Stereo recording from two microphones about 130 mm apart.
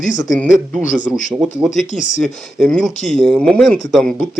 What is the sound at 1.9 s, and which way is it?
Speech, 70° left (ahead or behind).